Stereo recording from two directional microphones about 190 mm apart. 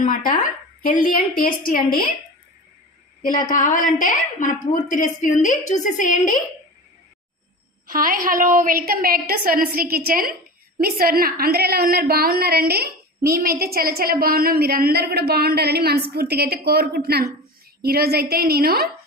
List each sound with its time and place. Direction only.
0.0 s a woman's voice: 45° left (ahead or behind)
3.5 s a woman's voice: 45° left (ahead or behind)
7.9 s a woman's voice: 45° right (ahead or behind)